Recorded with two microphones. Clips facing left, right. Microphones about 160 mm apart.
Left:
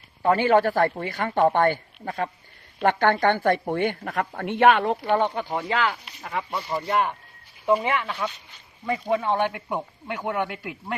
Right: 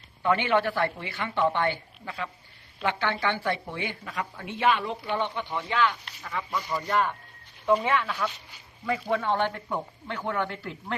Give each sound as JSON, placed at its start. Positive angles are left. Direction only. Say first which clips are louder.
{"t": 0.2, "sound": "speech", "louder": "left 5 dB", "side_deg": 40}
{"t": 6.2, "sound": "speech", "louder": "left 2 dB", "side_deg": 30}
{"t": 6.8, "sound": "speech", "louder": "left 2 dB", "side_deg": 10}